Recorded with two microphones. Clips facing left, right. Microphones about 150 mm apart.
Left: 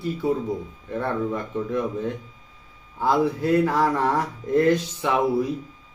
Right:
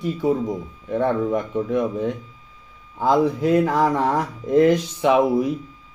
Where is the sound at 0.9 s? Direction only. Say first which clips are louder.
Right 5 dB; 15° right (ahead or behind).